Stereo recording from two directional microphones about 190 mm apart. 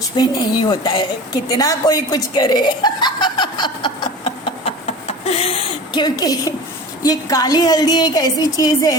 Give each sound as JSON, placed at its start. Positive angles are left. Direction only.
{"t": 0.2, "sound": "a woman's voice", "side_deg": 20}